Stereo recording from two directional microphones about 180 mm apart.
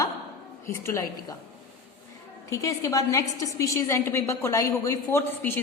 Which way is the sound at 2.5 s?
20° left (ahead or behind).